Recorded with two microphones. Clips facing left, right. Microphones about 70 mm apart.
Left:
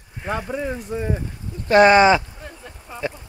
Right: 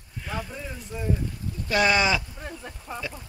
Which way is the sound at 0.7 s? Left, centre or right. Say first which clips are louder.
Left 9 dB; left.